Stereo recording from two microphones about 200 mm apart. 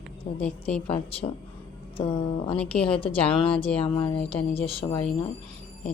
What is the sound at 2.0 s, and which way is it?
Speech, 30° left (ahead or behind).